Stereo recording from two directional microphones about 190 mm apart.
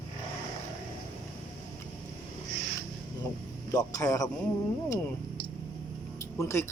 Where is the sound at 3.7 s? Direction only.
15° left (ahead or behind).